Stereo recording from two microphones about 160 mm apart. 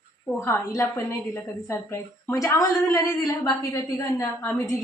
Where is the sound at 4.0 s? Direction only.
20° left (ahead or behind).